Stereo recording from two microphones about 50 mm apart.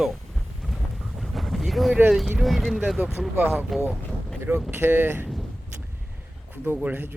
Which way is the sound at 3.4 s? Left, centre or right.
Right.